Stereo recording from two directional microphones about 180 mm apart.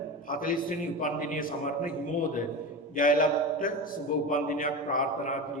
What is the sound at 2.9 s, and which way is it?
A man's voice, 50° left (ahead or behind).